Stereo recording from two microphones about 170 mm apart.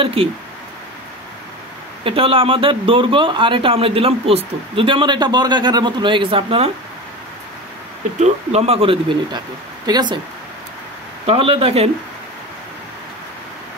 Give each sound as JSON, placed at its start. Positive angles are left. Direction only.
{"t": 0.0, "sound": "speech", "side_deg": -35}
{"t": 2.0, "sound": "speech", "side_deg": -30}
{"t": 8.2, "sound": "speech", "side_deg": -40}
{"t": 11.2, "sound": "speech", "side_deg": -30}